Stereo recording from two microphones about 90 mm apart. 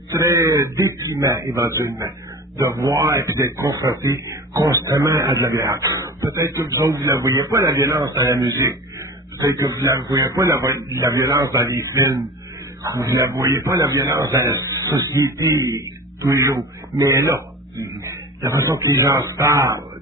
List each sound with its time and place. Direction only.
0.1 s a man's voice: 35° right (ahead or behind)